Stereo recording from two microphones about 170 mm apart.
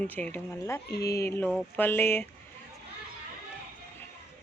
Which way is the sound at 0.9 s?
70° left (ahead or behind).